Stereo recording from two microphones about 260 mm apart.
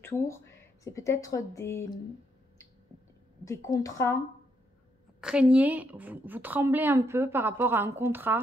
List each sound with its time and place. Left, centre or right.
0.0 s speech: centre
3.4 s speech: centre
5.2 s a woman's voice: centre